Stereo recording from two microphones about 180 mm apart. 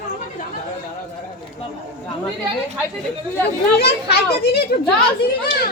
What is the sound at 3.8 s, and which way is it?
Children playing, 60° left (ahead or behind).